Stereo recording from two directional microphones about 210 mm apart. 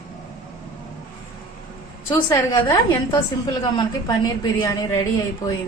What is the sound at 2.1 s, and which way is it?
A woman's voice, 20° left (ahead or behind).